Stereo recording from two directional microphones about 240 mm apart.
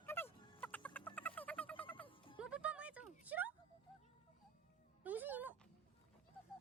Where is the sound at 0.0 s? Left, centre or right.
Centre.